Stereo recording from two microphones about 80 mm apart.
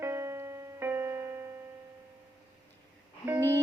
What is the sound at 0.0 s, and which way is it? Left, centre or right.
Music, right.